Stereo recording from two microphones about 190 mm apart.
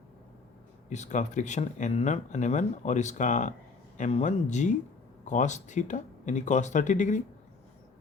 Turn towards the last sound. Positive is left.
turn(degrees=40)  # may be behind; listen again after turning